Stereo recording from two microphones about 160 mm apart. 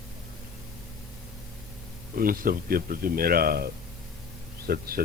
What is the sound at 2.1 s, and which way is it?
Speech, 65° right (ahead or behind).